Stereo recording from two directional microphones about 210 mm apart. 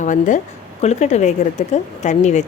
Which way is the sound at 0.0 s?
35° left (ahead or behind).